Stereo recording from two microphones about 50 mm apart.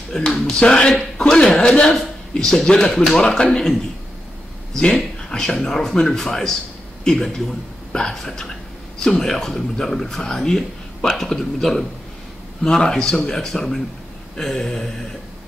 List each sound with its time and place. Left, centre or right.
0.1 s a man's voice: centre
1.9 s speech: centre
5.3 s speech: centre
7.9 s speech: centre